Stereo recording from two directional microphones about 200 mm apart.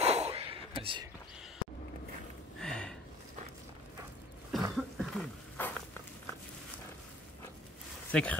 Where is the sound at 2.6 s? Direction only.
5° left (ahead or behind).